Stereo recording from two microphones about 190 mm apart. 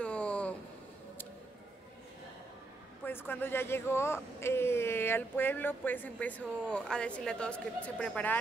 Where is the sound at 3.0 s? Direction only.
10° left (ahead or behind).